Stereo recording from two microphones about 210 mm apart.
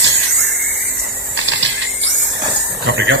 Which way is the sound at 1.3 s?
60° right (ahead or behind).